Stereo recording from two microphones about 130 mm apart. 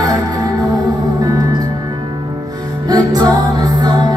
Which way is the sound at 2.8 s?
30° right (ahead or behind).